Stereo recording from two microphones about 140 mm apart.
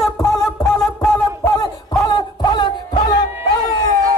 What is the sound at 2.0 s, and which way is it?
Music, 30° left (ahead or behind).